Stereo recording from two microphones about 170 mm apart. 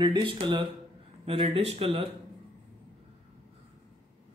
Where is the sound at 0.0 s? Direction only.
30° right (ahead or behind).